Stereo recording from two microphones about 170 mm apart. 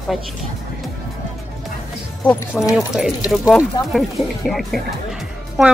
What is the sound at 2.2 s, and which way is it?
Speech, 10° left (ahead or behind).